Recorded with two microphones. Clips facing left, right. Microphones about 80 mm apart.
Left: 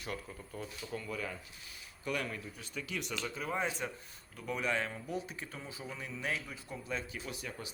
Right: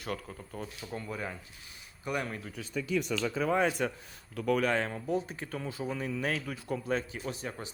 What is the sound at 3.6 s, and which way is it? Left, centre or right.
Speech, right.